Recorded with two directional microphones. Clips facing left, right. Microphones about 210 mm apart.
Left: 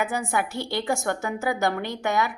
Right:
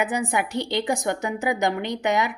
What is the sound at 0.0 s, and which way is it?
A woman's voice, 20° right (ahead or behind).